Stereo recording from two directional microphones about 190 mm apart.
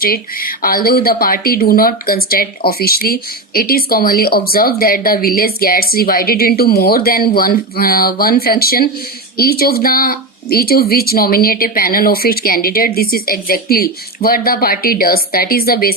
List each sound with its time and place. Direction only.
0.0 s speech: 50° left (ahead or behind)